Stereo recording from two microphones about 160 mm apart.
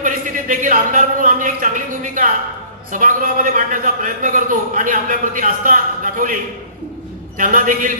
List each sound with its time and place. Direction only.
0.0 s a man's voice: 55° right (ahead or behind)